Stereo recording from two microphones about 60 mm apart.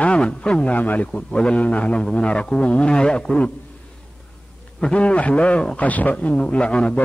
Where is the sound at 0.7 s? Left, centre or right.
Left.